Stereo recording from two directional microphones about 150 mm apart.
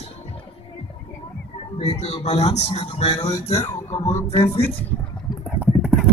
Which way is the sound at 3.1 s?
25° left (ahead or behind).